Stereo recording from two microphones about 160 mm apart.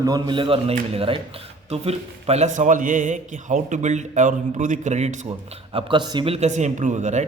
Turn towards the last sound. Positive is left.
turn(degrees=-50)  # may be behind; listen again after turning